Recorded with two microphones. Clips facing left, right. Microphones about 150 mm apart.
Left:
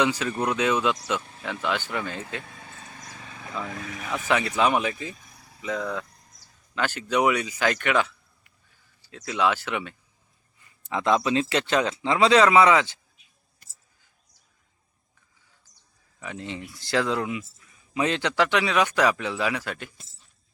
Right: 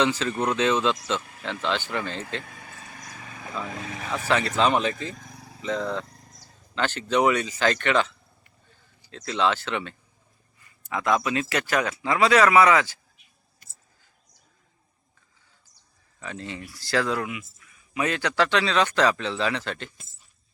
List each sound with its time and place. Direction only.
0.0 s speech: 15° left (ahead or behind)
3.3 s speech: 20° right (ahead or behind)
4.5 s speech: 10° left (ahead or behind)
10.8 s speech: 25° left (ahead or behind)
16.2 s speech: 15° left (ahead or behind)